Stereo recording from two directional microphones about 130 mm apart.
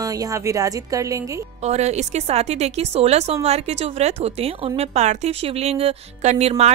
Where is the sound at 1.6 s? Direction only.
60° right (ahead or behind).